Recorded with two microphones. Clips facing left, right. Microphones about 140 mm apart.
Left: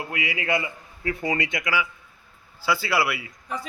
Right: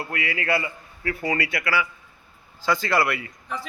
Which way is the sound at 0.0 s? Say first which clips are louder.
Right 1 dB; 15° left (ahead or behind).